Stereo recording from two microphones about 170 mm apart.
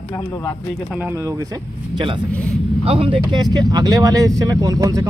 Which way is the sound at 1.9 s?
30° right (ahead or behind).